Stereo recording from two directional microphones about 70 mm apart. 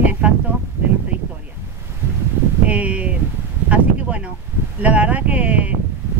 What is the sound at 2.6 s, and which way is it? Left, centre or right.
Speech, centre.